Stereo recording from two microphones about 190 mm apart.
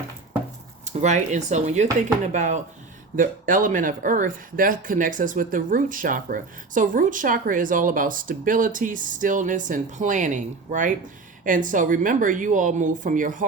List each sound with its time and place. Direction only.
0.9 s speech: 40° right (ahead or behind)